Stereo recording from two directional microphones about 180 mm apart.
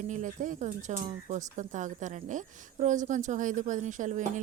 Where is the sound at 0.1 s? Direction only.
45° right (ahead or behind).